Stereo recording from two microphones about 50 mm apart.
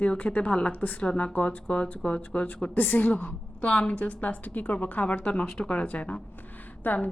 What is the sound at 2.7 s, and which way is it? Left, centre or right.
A woman's voice, left.